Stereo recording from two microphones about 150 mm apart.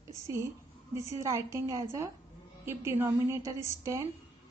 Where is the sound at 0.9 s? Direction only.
20° right (ahead or behind).